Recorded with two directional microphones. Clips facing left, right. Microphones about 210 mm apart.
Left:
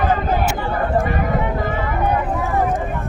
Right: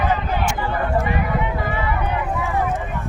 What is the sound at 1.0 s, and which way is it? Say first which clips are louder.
Run: left 2 dB; 45° left (ahead or behind).